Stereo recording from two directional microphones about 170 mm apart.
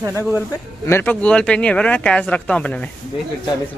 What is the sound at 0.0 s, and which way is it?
Speech, 15° right (ahead or behind).